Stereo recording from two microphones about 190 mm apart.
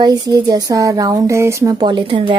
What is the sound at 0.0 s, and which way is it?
Speech, 20° right (ahead or behind).